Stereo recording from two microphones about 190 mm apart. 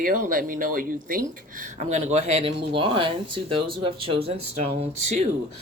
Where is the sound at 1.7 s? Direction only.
35° right (ahead or behind).